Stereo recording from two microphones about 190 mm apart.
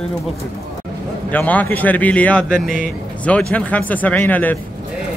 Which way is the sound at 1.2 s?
10° left (ahead or behind).